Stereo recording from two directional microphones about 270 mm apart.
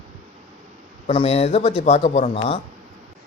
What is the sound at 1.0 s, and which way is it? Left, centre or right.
A man's voice, left.